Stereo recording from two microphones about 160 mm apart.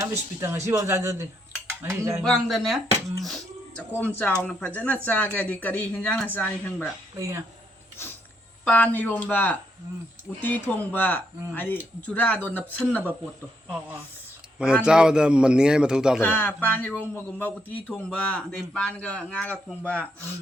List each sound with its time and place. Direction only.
0.0 s speech: 20° right (ahead or behind)
2.2 s a man's voice: centre (ahead or behind)
4.2 s speech: 10° left (ahead or behind)
7.2 s speech: 15° right (ahead or behind)
8.6 s speech: 10° left (ahead or behind)
14.6 s a man's voice: 5° right (ahead or behind)
16.2 s speech: 10° left (ahead or behind)